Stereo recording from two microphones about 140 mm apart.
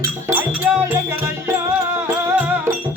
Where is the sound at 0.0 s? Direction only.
15° right (ahead or behind).